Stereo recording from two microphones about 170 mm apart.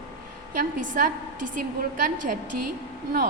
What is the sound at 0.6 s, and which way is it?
A woman's voice, 55° right (ahead or behind).